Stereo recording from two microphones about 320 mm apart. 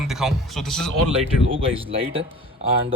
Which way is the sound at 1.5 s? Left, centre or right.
Centre.